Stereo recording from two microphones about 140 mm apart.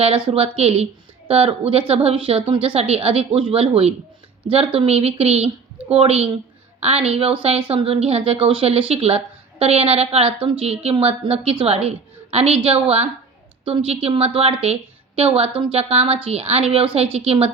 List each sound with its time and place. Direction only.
0.0 s a woman's voice: 40° right (ahead or behind)